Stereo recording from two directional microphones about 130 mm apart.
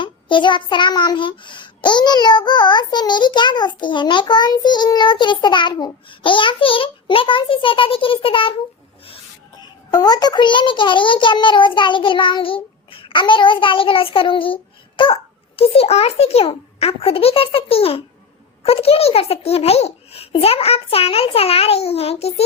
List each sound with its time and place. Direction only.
0.0 s child singing: 40° left (ahead or behind)
9.6 s child singing: 30° left (ahead or behind); by 18.0 s 50° left (ahead or behind)
18.6 s a child's voice: 50° left (ahead or behind)